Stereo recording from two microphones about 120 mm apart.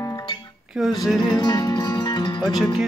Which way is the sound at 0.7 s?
5° right (ahead or behind).